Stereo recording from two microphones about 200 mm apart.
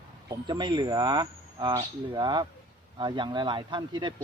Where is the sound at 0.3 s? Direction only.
20° right (ahead or behind).